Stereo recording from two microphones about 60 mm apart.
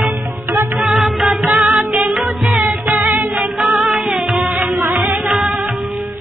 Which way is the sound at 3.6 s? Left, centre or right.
Centre.